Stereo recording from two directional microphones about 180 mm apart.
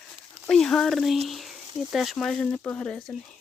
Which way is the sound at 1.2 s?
Centre (ahead or behind).